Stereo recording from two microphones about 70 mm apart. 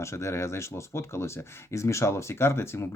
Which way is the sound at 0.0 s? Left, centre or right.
Left.